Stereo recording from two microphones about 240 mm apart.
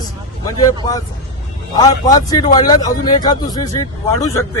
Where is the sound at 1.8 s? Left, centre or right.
Centre.